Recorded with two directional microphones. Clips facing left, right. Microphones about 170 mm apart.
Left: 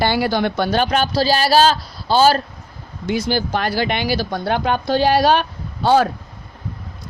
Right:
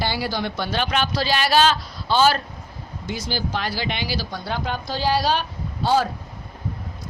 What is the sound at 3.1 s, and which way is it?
Speech, 60° left (ahead or behind).